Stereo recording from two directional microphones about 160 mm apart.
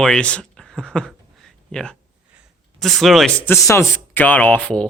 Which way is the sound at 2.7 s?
Centre (ahead or behind).